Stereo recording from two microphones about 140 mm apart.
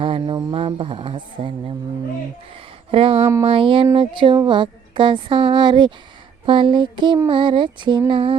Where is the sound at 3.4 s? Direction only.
40° right (ahead or behind).